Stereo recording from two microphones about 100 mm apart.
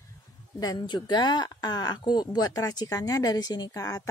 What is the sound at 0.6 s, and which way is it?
A woman's voice, 45° left (ahead or behind).